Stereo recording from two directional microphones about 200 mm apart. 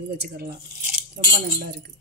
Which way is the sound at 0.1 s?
55° right (ahead or behind).